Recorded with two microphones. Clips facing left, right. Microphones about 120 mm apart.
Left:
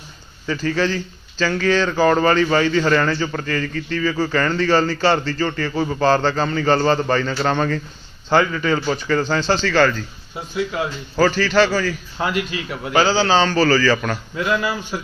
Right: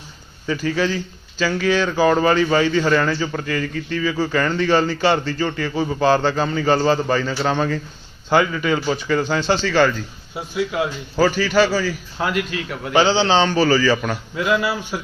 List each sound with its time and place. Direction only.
0.4 s speech: 15° right (ahead or behind)
12.2 s a man's voice: centre (ahead or behind)
12.9 s speech: 25° right (ahead or behind)